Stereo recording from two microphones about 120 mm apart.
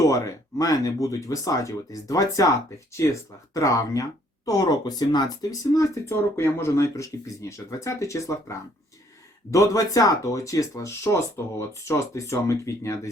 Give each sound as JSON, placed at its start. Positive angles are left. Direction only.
{"t": 0.6, "sound": "speech", "side_deg": 30}